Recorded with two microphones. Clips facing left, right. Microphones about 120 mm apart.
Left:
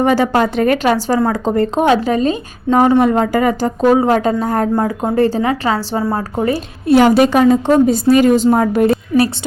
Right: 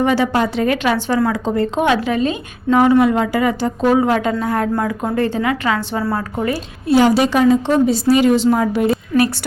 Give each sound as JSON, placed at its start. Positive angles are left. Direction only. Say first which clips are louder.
{"t": 0.0, "sound": "a woman's voice", "louder": "left 3 dB", "side_deg": 45}
{"t": 6.8, "sound": "a woman's voice", "louder": "left 3 dB", "side_deg": 60}